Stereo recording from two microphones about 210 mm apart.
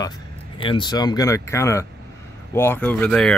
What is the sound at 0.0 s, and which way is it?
Speech, 20° left (ahead or behind).